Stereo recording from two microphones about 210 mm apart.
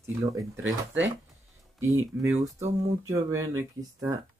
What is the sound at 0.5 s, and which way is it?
Speech, 65° right (ahead or behind).